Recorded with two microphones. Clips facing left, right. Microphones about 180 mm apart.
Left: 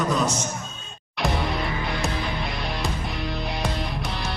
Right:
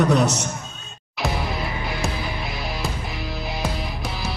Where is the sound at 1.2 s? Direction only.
Centre (ahead or behind).